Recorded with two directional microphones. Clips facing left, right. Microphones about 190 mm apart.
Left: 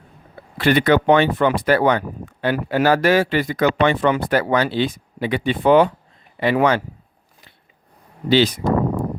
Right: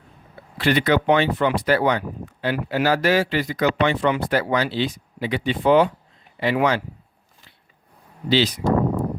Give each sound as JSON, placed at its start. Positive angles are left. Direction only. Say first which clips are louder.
{"t": 0.6, "sound": "speech", "louder": "left 3 dB", "side_deg": 55}
{"t": 8.3, "sound": "speech", "louder": "left 4 dB", "side_deg": 55}